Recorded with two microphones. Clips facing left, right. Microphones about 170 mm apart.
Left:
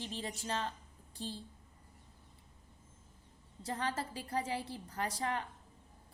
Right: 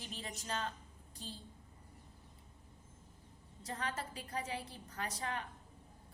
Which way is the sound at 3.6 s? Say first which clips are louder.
Left 4 dB; 30° left (ahead or behind).